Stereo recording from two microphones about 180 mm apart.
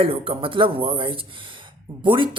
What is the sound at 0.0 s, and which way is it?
Speech, 30° right (ahead or behind).